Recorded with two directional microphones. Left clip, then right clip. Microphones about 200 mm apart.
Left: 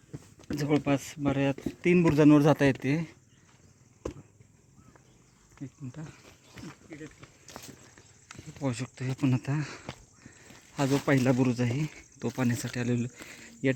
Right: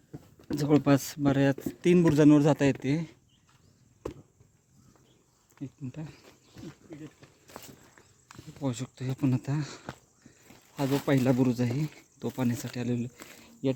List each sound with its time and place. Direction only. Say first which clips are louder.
0.5 s speech: right 3 dB; 20° right (ahead or behind)
0.9 s speech: right 3 dB; 35° right (ahead or behind)
1.8 s speech: even; 20° right (ahead or behind)
2.3 s speech: left 1 dB; centre (ahead or behind)
4.0 s chop: left 1 dB; centre (ahead or behind)
6.5 s a sound: left 1 dB; 30° left (ahead or behind)
7.6 s a sound: even; 15° right (ahead or behind)
8.5 s speech: left 1 dB; 5° right (ahead or behind)
10.9 s speech: even; 5° right (ahead or behind)